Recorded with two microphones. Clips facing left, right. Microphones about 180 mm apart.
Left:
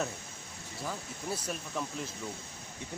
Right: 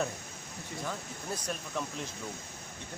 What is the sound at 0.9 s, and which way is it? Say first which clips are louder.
Speech: left 2 dB; 5° left (ahead or behind).